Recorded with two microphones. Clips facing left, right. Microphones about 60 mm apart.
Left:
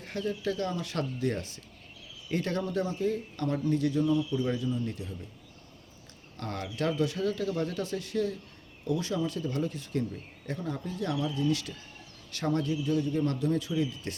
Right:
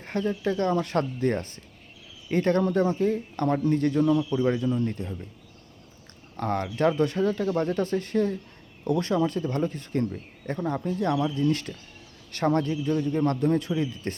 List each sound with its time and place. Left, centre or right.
0.0 s a man's voice: right
4.0 s speech: right
4.4 s a man's voice: right
6.3 s speech: right
8.8 s a man's voice: right